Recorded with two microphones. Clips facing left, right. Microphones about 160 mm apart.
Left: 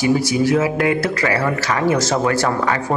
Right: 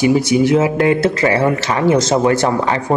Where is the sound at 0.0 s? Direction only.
20° right (ahead or behind).